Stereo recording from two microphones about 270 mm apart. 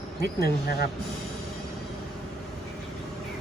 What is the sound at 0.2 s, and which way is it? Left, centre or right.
Speech, left.